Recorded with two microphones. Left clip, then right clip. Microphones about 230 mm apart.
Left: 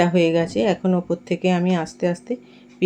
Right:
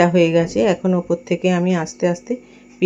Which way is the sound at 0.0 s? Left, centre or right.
Centre.